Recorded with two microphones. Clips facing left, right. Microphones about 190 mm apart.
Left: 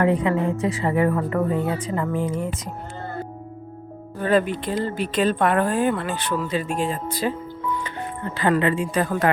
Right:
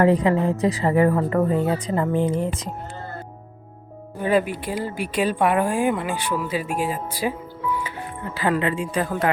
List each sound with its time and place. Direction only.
0.0 s a woman's voice: 35° right (ahead or behind)
4.2 s speech: 10° right (ahead or behind)
8.8 s speech: 45° left (ahead or behind)